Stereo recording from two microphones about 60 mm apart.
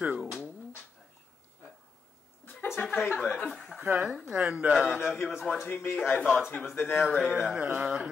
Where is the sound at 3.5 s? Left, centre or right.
Centre.